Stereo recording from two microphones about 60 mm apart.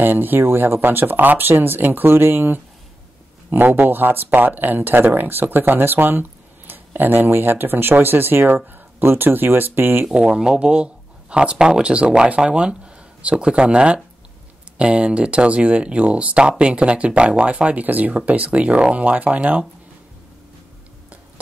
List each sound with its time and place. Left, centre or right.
0.0 s speech: right
10.0 s speech: centre